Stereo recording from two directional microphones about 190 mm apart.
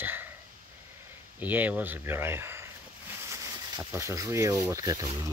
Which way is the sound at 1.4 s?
10° right (ahead or behind).